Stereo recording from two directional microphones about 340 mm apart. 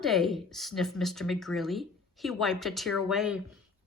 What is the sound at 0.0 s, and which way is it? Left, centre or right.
Speech, centre.